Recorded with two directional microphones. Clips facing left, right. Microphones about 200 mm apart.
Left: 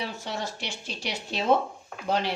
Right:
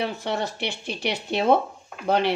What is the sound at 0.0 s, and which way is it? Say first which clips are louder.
Speech: right 6 dB; 60° right (ahead or behind).